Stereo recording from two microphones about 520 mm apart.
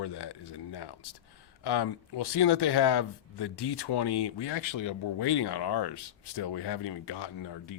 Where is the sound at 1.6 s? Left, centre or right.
Left.